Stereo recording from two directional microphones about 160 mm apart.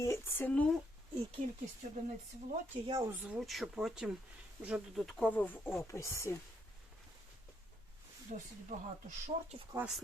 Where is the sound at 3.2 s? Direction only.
5° right (ahead or behind); by 6.4 s 15° left (ahead or behind).